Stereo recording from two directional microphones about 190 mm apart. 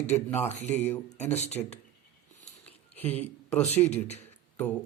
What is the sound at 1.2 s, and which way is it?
Speech, 35° left (ahead or behind).